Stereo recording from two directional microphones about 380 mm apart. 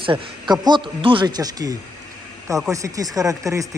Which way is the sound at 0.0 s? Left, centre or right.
Centre.